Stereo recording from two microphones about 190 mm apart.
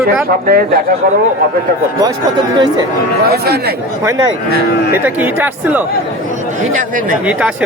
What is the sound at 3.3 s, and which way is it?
Speech, 55° right (ahead or behind).